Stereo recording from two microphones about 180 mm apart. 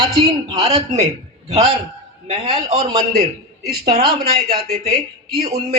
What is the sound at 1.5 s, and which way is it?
Speech, 35° right (ahead or behind).